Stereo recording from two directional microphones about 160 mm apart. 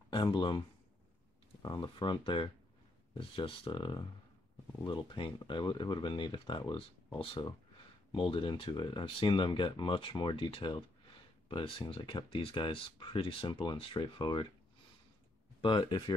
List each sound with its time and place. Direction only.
0.1 s speech: 30° left (ahead or behind)
1.6 s speech: 25° left (ahead or behind)
15.6 s speech: 30° left (ahead or behind)